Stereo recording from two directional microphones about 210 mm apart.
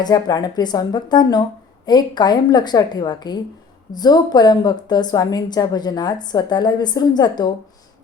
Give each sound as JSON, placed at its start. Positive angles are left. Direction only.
{"t": 0.0, "sound": "a woman's voice", "side_deg": 20}